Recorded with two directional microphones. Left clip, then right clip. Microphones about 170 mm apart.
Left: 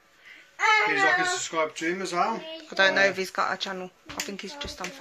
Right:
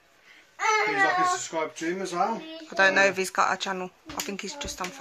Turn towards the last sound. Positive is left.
turn(degrees=-15)  # may be behind; listen again after turning